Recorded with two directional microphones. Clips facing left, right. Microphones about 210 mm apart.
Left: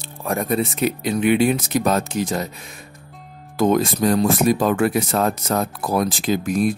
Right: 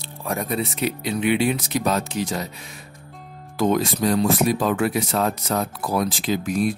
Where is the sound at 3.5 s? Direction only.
45° left (ahead or behind).